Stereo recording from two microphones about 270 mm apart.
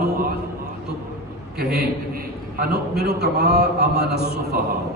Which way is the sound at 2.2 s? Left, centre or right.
Right.